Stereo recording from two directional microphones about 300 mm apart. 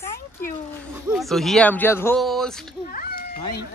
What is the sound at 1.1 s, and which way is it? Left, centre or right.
Speech, centre.